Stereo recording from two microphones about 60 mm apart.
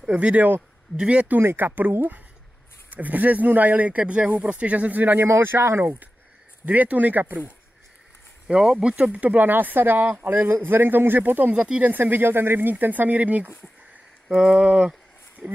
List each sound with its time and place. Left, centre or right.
0.1 s speech: right
1.6 s speech: right
5.2 s speech: right
6.6 s speech: right
8.5 s speech: centre; by 13.5 s right
14.3 s a sound: centre